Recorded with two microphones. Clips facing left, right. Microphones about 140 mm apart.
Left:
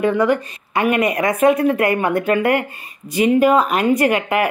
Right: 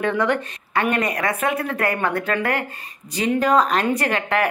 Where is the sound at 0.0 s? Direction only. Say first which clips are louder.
Left 4 dB; 5° left (ahead or behind).